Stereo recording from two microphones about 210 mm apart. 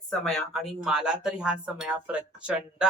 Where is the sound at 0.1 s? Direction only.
Centre (ahead or behind).